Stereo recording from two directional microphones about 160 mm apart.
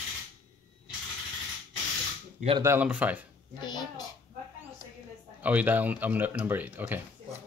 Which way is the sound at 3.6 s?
25° left (ahead or behind).